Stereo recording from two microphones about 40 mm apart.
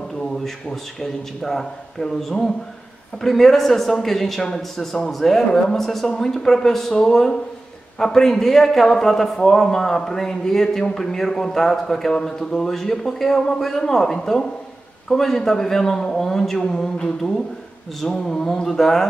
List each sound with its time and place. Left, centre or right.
0.2 s a man's voice: centre